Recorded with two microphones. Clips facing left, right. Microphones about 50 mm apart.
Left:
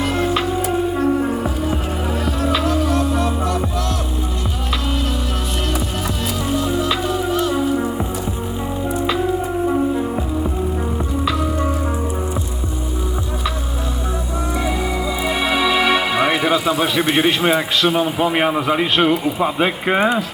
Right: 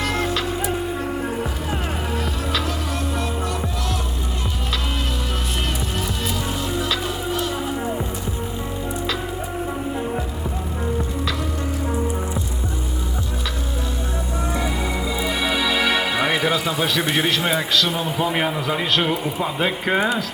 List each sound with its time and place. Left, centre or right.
0.0 s music: centre
2.6 s music: centre
7.5 s music: centre
9.6 s music: centre
14.5 s music: centre
17.2 s a man's voice: left